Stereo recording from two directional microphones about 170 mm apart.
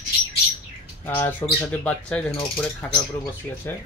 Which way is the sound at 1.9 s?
5° left (ahead or behind).